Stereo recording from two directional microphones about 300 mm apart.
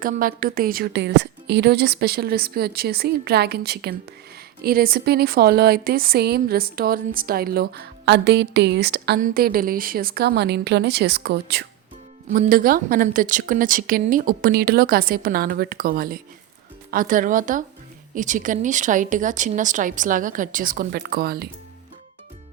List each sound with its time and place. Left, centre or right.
0.0 s a woman's voice: right